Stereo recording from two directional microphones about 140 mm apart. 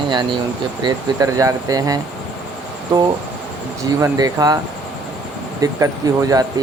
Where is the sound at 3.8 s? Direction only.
25° right (ahead or behind).